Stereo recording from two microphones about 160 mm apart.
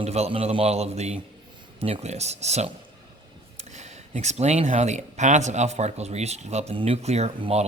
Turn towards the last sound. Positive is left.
turn(degrees=-40)  # may be behind; listen again after turning